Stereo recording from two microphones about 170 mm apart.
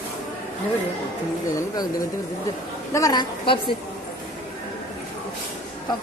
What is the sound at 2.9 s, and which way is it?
Speech, 20° left (ahead or behind).